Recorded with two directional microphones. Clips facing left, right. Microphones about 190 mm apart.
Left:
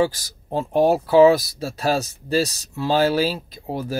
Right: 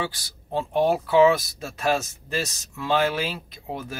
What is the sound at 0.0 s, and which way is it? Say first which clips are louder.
Speech: left 10 dB; 40° left (ahead or behind).